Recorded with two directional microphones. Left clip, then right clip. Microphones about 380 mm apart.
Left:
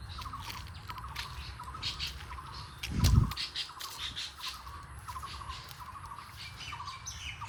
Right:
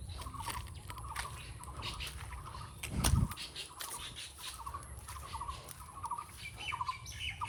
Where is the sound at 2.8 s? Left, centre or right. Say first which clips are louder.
Left 3 dB; centre.